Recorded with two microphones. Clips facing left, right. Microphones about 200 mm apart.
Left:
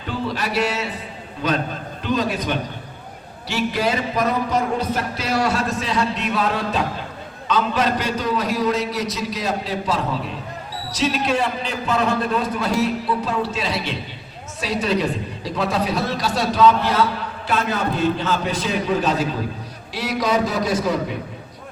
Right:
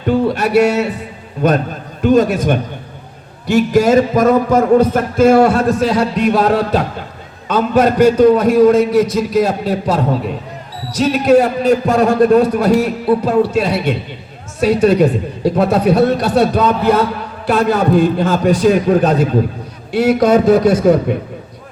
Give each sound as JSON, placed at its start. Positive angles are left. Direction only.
{"t": 0.1, "sound": "a man's voice", "side_deg": -60}
{"t": 2.0, "sound": "a man's voice", "side_deg": -50}
{"t": 5.9, "sound": "music", "side_deg": -40}
{"t": 6.5, "sound": "a man's voice", "side_deg": -60}
{"t": 10.9, "sound": "a man's voice", "side_deg": -45}
{"t": 12.4, "sound": "a man's voice", "side_deg": -60}